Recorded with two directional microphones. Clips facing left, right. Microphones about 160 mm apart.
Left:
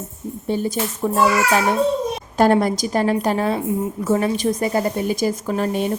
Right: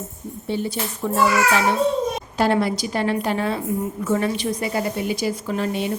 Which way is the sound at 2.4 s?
45° left (ahead or behind).